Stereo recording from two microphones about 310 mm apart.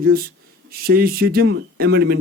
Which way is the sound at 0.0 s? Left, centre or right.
Right.